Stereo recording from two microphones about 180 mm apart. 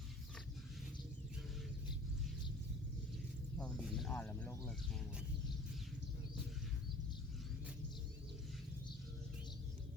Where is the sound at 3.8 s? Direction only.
Centre (ahead or behind).